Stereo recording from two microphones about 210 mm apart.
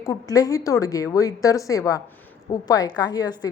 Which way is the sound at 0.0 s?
15° left (ahead or behind).